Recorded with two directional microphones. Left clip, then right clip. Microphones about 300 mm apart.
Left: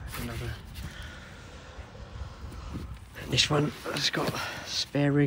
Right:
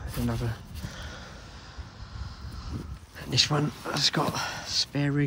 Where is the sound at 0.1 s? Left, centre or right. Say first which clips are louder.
Right 5 dB; centre.